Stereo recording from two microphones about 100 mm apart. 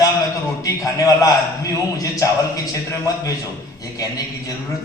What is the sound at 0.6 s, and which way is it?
Speech, 35° left (ahead or behind).